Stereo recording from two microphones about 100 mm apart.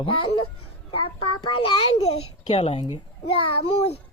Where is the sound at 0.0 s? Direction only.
60° left (ahead or behind).